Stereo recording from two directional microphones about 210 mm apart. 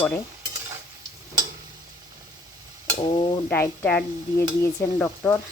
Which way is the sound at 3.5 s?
10° left (ahead or behind).